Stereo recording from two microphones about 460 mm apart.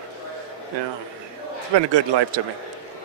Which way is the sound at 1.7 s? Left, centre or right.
Right.